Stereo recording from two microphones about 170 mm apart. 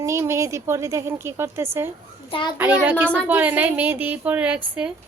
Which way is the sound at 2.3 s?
25° left (ahead or behind).